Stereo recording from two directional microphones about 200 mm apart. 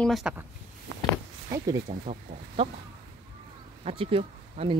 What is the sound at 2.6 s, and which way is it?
Speech, 25° right (ahead or behind).